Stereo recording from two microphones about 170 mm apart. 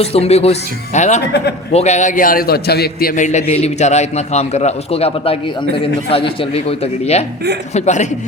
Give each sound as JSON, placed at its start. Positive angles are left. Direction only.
{"t": 0.0, "sound": "a man's voice", "side_deg": 35}